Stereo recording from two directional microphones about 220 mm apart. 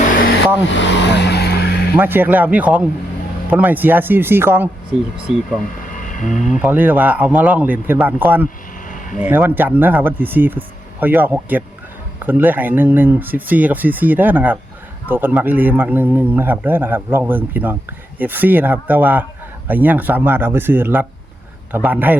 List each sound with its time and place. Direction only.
0.7 s vehicle: 55° left (ahead or behind)
2.0 s speech: 10° right (ahead or behind)
5.9 s a sound: 35° left (ahead or behind)
6.3 s speech: centre (ahead or behind)